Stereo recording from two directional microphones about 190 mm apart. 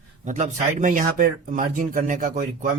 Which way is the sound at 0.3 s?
40° right (ahead or behind).